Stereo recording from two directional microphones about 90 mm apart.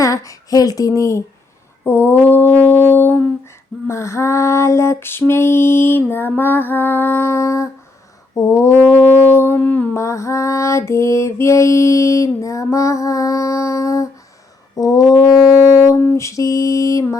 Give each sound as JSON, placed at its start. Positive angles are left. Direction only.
{"t": 0.0, "sound": "female singing", "side_deg": 35}
{"t": 9.6, "sound": "mantra", "side_deg": 15}
{"t": 9.9, "sound": "female singing", "side_deg": 35}
{"t": 14.8, "sound": "brass instrument", "side_deg": 40}
{"t": 16.0, "sound": "female singing", "side_deg": 35}